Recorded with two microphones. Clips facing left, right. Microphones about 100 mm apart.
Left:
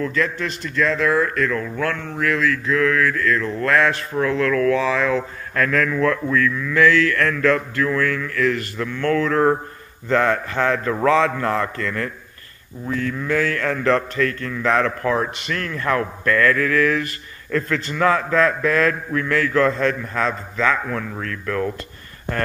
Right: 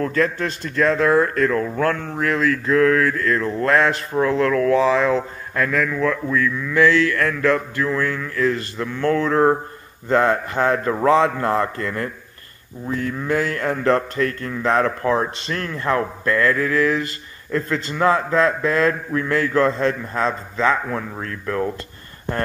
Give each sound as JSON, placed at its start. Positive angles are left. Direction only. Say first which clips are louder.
{"t": 0.0, "sound": "a man's voice", "louder": "right 2 dB", "side_deg": -40}
{"t": 5.5, "sound": "speech", "louder": "left 1 dB", "side_deg": -10}
{"t": 6.3, "sound": "a man's voice", "louder": "even", "side_deg": -15}